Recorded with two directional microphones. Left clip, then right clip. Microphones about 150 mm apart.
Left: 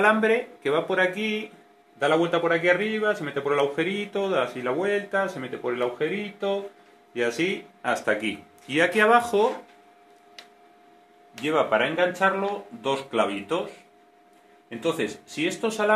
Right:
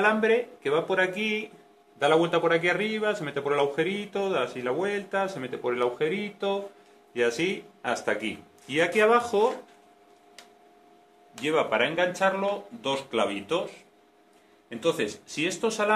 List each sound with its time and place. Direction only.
0.0 s speech: 30° left (ahead or behind)
2.0 s a man's voice: 10° left (ahead or behind)
7.2 s speech: 30° left (ahead or behind)
11.4 s speech: 40° left (ahead or behind)
14.7 s speech: 30° left (ahead or behind)